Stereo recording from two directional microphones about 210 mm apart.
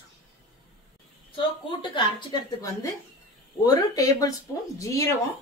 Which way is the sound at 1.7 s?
20° left (ahead or behind).